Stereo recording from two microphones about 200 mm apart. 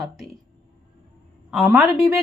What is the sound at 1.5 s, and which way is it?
Speech, centre (ahead or behind).